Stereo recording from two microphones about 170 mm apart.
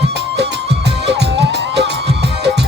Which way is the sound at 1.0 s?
80° right.